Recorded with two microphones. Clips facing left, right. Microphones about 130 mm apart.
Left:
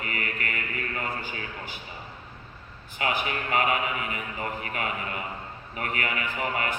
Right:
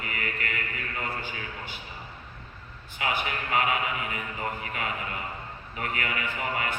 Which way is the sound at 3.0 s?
45° left (ahead or behind).